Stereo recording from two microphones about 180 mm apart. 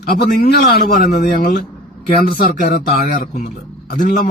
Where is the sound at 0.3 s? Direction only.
55° left (ahead or behind).